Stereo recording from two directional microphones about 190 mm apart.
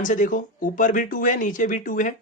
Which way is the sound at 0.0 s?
45° left (ahead or behind).